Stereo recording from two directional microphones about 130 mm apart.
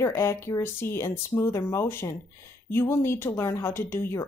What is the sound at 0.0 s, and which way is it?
A woman's voice, 20° left (ahead or behind).